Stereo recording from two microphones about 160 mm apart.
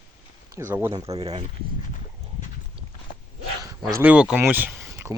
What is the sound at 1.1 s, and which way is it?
Speech, 40° right (ahead or behind).